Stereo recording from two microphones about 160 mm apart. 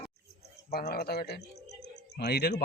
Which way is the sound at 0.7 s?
80° left.